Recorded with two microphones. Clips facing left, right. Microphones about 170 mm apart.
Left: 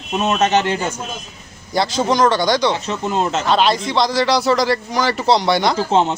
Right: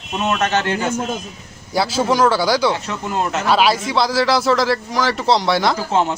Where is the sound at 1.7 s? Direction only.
5° right (ahead or behind).